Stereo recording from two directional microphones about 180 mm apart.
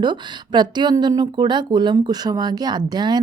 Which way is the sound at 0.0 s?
25° right (ahead or behind).